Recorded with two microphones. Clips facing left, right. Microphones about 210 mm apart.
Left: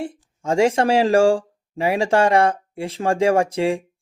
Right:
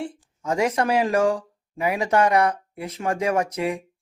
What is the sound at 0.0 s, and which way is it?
Speech, 25° left (ahead or behind).